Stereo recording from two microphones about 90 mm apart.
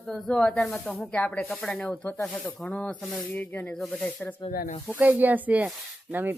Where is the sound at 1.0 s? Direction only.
15° left (ahead or behind).